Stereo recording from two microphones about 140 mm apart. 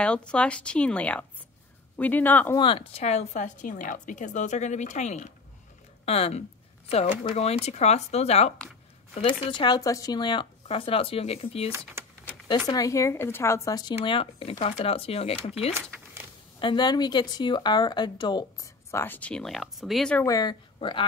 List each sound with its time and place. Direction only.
0.0 s speech: 10° left (ahead or behind)
2.5 s a woman's voice: 40° left (ahead or behind)
11.7 s speech: 15° right (ahead or behind)
12.4 s speech: 30° left (ahead or behind); by 15.7 s 45° left (ahead or behind)
16.5 s speech: 35° left (ahead or behind)
18.9 s speech: 15° left (ahead or behind)
20.2 s speech: 30° left (ahead or behind)